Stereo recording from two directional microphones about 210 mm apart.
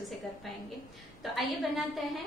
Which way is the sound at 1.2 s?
Centre (ahead or behind).